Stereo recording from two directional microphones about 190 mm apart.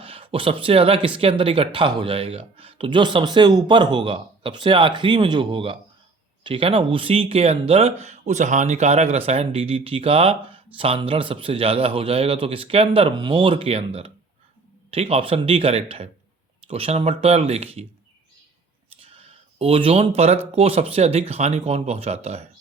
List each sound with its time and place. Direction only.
0.0 s speech: 30° right (ahead or behind)
18.9 s a sound: 30° right (ahead or behind)
20.5 s speech: 30° right (ahead or behind)